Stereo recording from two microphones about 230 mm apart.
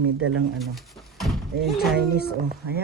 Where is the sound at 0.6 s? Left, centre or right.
Centre.